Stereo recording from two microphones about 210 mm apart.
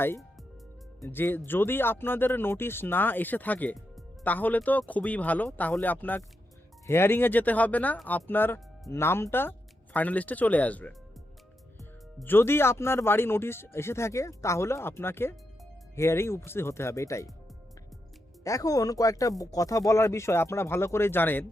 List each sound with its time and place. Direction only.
1.0 s speech: 10° left (ahead or behind)
12.2 s speech: 10° left (ahead or behind)
18.4 s speech: 15° left (ahead or behind)